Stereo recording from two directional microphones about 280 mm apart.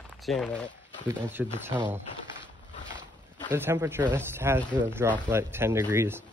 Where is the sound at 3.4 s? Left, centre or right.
Centre.